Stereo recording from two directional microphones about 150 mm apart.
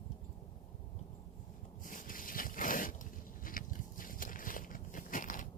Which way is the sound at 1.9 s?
65° left (ahead or behind).